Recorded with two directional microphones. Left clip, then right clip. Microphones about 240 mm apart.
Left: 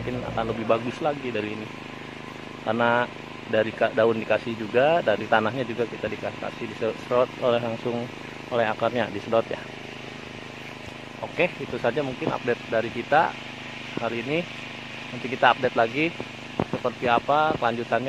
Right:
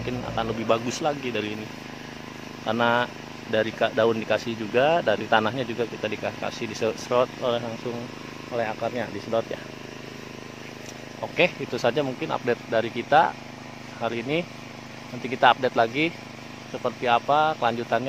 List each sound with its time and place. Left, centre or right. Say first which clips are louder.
0.4 s speech: even; centre
2.6 s speech: even; centre
8.5 s speech: left 4 dB; centre
11.3 s speech: right 2 dB; centre